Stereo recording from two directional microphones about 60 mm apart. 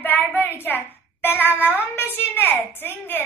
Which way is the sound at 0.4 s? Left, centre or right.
Left.